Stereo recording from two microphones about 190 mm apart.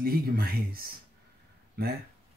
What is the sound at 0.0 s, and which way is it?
Speech, 55° right (ahead or behind).